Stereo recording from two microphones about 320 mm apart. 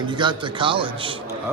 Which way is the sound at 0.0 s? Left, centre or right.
Centre.